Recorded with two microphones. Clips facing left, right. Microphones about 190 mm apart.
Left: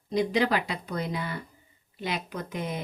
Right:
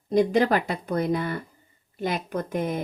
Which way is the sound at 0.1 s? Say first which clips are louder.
Right 5 dB; 50° right (ahead or behind).